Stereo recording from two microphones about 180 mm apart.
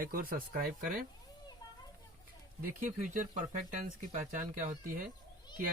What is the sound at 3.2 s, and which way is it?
Speech, 45° right (ahead or behind).